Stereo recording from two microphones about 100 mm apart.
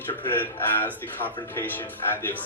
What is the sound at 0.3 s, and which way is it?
A man's voice, 20° left (ahead or behind).